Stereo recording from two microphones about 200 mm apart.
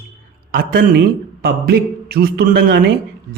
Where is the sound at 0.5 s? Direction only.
45° right (ahead or behind).